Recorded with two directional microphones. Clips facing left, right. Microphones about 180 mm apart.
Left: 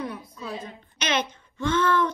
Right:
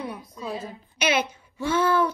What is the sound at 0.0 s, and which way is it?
A woman's voice, 10° right (ahead or behind).